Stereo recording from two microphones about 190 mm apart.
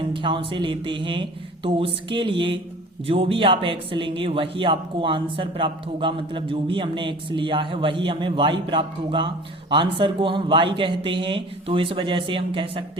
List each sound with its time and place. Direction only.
0.1 s speech: 25° right (ahead or behind)